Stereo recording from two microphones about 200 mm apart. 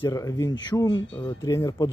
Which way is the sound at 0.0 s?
15° left (ahead or behind).